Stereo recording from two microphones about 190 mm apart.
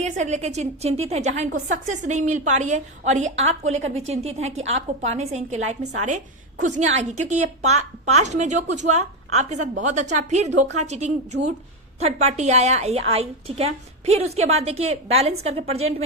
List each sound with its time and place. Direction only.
0.0 s a woman's voice: 40° right (ahead or behind)